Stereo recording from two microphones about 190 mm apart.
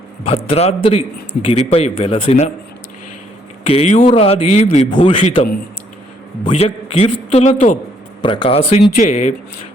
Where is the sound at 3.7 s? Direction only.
35° left (ahead or behind).